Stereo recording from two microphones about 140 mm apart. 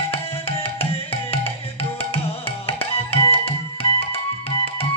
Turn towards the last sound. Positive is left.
turn(degrees=45)  # may be behind; listen again after turning